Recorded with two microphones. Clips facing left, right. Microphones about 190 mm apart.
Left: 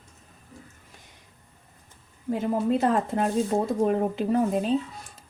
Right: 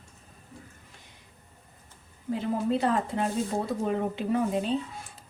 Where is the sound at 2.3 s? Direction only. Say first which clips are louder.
Left 3 dB; 45° left (ahead or behind).